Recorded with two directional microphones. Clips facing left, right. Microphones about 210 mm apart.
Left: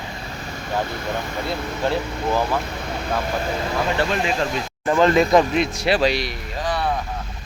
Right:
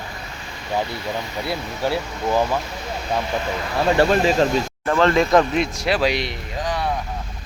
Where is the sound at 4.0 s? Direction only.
40° right (ahead or behind).